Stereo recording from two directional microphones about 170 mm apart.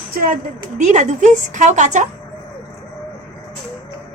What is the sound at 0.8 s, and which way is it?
Speech, 45° right (ahead or behind).